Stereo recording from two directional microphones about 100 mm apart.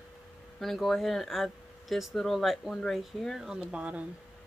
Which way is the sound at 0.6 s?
Centre (ahead or behind).